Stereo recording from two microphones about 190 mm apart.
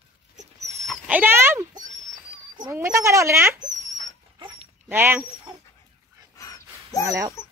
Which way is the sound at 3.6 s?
40° right (ahead or behind).